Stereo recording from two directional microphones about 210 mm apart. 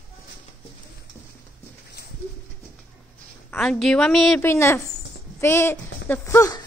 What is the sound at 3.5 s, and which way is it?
A woman's voice, centre (ahead or behind).